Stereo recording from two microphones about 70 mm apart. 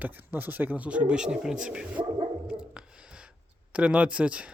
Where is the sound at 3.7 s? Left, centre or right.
Centre.